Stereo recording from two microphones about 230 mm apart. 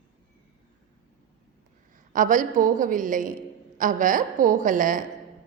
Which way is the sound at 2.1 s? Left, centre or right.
Right.